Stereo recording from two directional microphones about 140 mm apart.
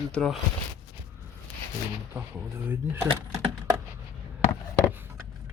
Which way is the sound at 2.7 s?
15° right (ahead or behind).